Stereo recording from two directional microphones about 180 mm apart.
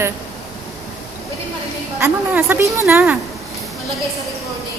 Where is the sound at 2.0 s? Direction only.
10° right (ahead or behind).